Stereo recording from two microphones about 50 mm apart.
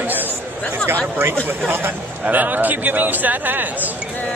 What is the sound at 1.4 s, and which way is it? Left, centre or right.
A man's voice, right.